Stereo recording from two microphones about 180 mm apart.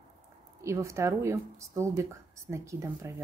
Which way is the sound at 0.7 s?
15° right (ahead or behind).